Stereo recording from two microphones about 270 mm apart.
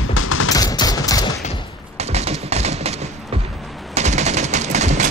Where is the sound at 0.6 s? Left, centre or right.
Centre.